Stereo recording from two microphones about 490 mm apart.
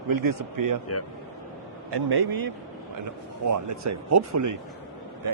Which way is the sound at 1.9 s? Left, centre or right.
Right.